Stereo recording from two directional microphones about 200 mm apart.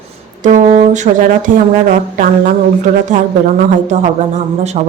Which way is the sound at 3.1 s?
35° right (ahead or behind).